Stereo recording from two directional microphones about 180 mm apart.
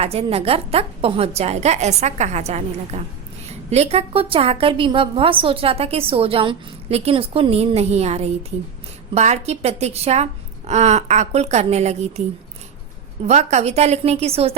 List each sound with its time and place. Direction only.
0.0 s a woman's voice: 35° right (ahead or behind)
13.2 s a woman's voice: 40° right (ahead or behind)